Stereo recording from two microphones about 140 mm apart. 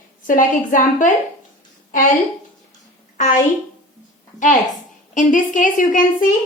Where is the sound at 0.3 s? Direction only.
70° left (ahead or behind).